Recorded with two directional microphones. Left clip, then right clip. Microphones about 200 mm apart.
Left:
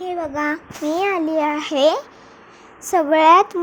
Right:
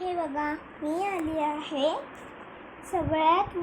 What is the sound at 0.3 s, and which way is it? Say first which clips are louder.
A child's voice: left 8 dB; 45° left (ahead or behind).